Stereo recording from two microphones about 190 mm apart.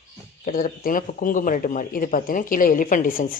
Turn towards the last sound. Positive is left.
turn(degrees=45)  # may be behind; listen again after turning